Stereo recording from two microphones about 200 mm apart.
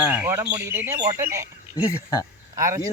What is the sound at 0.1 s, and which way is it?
Speech, 10° right (ahead or behind).